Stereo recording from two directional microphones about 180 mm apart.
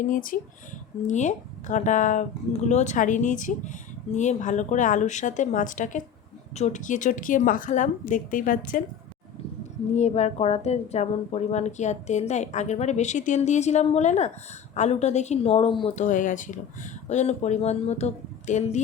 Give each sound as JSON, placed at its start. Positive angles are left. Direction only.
{"t": 0.0, "sound": "speech", "side_deg": 50}
{"t": 9.9, "sound": "a woman's voice", "side_deg": 40}
{"t": 16.0, "sound": "a woman's voice", "side_deg": 45}